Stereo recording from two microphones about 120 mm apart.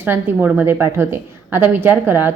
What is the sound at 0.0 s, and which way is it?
A woman's voice, 15° right (ahead or behind).